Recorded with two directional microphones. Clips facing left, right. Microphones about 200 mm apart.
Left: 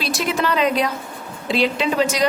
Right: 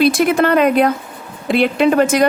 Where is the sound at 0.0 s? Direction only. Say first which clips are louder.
Right 9 dB; 55° right (ahead or behind).